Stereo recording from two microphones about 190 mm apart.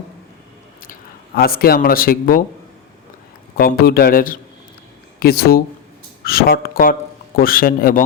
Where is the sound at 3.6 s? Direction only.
50° left (ahead or behind).